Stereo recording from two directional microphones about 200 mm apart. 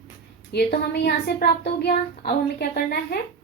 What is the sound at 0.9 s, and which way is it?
A woman's voice, 55° left (ahead or behind).